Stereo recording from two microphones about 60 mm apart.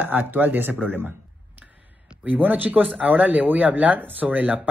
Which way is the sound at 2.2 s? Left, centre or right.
Right.